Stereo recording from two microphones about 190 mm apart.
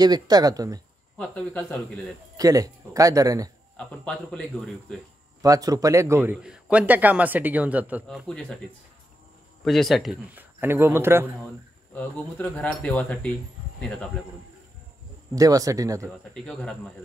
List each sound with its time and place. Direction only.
0.0 s speech: 20° right (ahead or behind)
1.1 s speech: 5° left (ahead or behind)
2.3 s a man's voice: 20° right (ahead or behind)
3.7 s speech: 5° left (ahead or behind)
5.4 s a man's voice: 20° right (ahead or behind); by 8.5 s centre (ahead or behind)
9.7 s speech: centre (ahead or behind)
10.6 s a man's voice: 10° right (ahead or behind)
11.9 s speech: 10° left (ahead or behind)
15.3 s a man's voice: 20° right (ahead or behind)
16.4 s speech: 5° left (ahead or behind)